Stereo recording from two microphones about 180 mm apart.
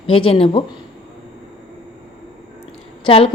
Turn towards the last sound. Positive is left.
turn(degrees=30)  # may be behind; listen again after turning